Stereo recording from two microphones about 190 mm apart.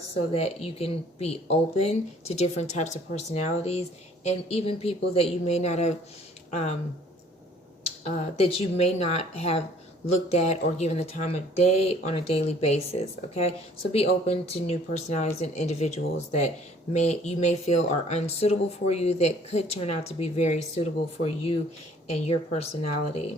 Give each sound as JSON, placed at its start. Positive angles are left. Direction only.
{"t": 0.3, "sound": "speech", "side_deg": 30}
{"t": 7.9, "sound": "speech", "side_deg": 35}